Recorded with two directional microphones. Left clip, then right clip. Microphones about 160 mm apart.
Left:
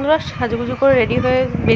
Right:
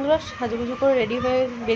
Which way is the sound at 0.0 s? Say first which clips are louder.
Left 5 dB; 20° left (ahead or behind).